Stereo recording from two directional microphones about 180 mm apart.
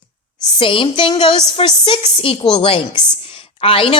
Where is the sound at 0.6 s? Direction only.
30° left (ahead or behind).